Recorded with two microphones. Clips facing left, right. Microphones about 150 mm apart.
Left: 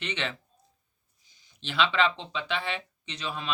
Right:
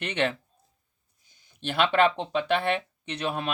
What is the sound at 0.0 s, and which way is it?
Speech, 55° right (ahead or behind).